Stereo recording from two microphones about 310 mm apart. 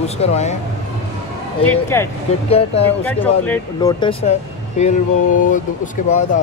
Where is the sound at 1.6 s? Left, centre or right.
Centre; by 6.1 s left.